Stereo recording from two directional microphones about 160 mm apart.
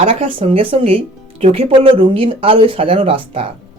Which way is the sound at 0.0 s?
35° right (ahead or behind).